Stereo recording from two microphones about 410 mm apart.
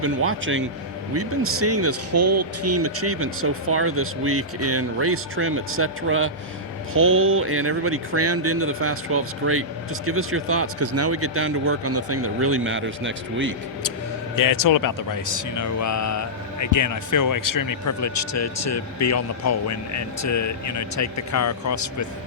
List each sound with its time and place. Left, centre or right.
0.0 s a man's voice: right
14.3 s speech: left